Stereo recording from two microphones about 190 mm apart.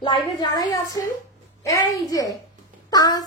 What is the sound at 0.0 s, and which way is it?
A woman's voice, 25° left (ahead or behind).